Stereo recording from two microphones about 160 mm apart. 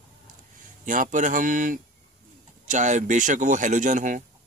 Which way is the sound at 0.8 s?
55° right (ahead or behind).